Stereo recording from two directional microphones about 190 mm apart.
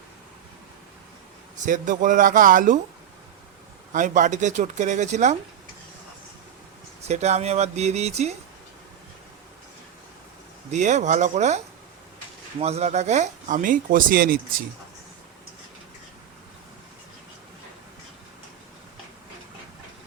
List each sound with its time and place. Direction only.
1.6 s speech: 40° right (ahead or behind)
3.9 s speech: 40° right (ahead or behind)
7.1 s speech: 35° right (ahead or behind)
10.7 s speech: 40° right (ahead or behind)